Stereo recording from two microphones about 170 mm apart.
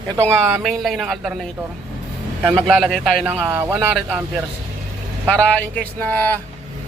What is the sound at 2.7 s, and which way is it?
Speech, centre (ahead or behind).